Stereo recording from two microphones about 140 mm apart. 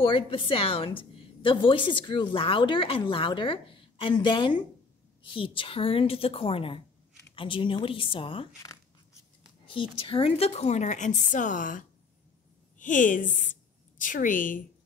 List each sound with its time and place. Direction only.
0.0 s a woman's voice: 35° left (ahead or behind)
9.7 s a woman's voice: 40° left (ahead or behind); by 14.6 s 70° left (ahead or behind)